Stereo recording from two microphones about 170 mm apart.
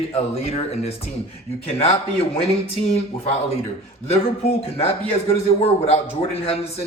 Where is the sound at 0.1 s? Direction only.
35° left (ahead or behind).